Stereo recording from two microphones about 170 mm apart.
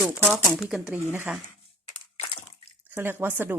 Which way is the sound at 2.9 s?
15° right (ahead or behind).